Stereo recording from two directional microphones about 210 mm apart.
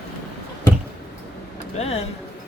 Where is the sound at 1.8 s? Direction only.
30° left (ahead or behind).